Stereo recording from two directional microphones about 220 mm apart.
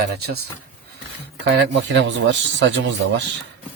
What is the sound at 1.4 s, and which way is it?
Speech, 50° right (ahead or behind).